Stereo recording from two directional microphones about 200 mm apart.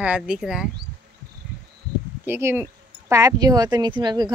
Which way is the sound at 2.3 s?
10° right (ahead or behind).